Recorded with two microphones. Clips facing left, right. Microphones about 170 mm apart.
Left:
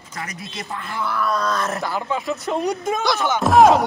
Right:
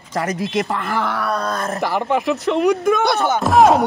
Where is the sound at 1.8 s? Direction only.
75° right (ahead or behind).